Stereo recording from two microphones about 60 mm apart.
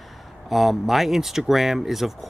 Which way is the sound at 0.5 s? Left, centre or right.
Centre.